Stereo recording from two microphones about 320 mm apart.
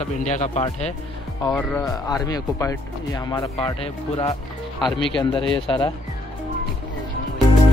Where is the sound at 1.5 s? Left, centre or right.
Centre.